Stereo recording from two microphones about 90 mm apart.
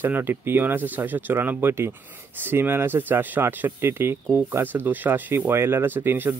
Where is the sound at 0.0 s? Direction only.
25° right (ahead or behind).